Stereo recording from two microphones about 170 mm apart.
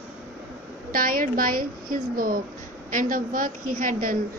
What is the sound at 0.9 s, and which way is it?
A woman's voice, 55° right (ahead or behind).